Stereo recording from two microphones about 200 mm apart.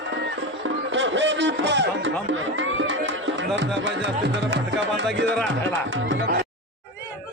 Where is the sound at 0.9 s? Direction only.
65° right (ahead or behind).